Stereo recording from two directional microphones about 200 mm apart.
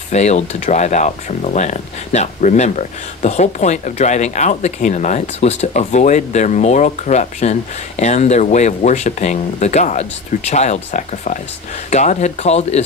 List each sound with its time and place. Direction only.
0.1 s speech: 35° left (ahead or behind)